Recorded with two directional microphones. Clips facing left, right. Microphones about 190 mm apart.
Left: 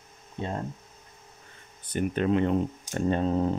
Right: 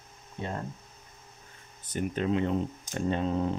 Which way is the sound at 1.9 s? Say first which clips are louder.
Left 3 dB; 60° left (ahead or behind).